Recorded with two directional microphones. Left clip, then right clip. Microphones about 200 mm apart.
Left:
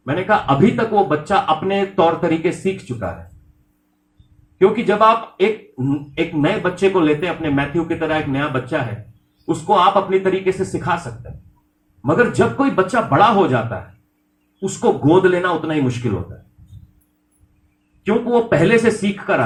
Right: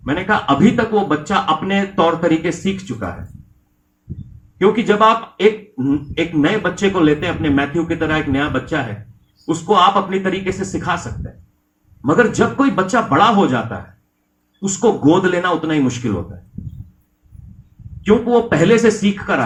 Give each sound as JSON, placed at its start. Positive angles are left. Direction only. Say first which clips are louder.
{"t": 0.0, "sound": "speech", "louder": "even", "side_deg": -35}
{"t": 4.5, "sound": "speech", "louder": "right 1 dB", "side_deg": -35}
{"t": 12.0, "sound": "speech", "louder": "right 1 dB", "side_deg": -35}
{"t": 18.0, "sound": "speech", "louder": "right 3 dB", "side_deg": -35}